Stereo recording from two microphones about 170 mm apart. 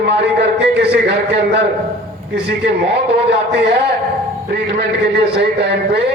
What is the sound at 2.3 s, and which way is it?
Speech, 85° right.